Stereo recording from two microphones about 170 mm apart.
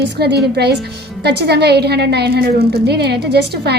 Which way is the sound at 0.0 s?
85° right.